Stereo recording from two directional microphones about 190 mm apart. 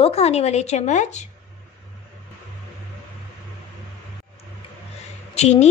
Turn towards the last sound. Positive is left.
turn(degrees=35)  # may be behind; listen again after turning